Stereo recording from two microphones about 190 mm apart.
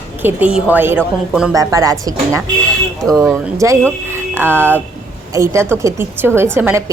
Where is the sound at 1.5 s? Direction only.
20° right (ahead or behind).